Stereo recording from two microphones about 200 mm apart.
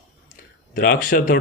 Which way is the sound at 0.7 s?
45° left (ahead or behind).